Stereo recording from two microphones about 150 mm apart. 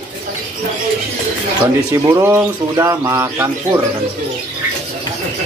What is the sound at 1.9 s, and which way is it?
Speech, 15° right (ahead or behind).